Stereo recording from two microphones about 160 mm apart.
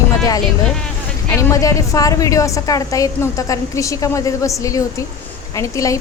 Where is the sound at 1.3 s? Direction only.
20° left (ahead or behind).